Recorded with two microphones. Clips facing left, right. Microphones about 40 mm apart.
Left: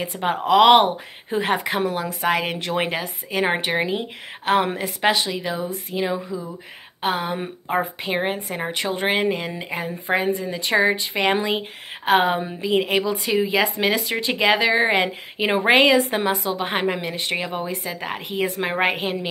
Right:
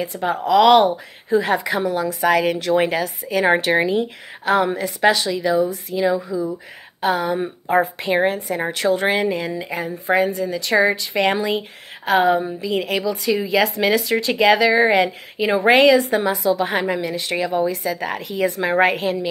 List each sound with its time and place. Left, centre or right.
0.0 s a woman's voice: left
2.9 s speech: centre
4.7 s speech: left
8.0 s a woman's voice: centre
8.5 s a woman's voice: left
12.0 s a woman's voice: left
12.5 s speech: left
15.6 s a woman's voice: centre
16.0 s a woman's voice: left
18.8 s speech: centre